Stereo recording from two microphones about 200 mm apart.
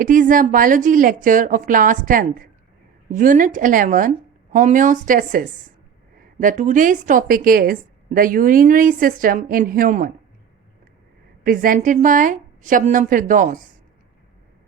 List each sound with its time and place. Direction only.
0.0 s a woman's voice: 40° right (ahead or behind)
11.4 s a woman's voice: 45° right (ahead or behind)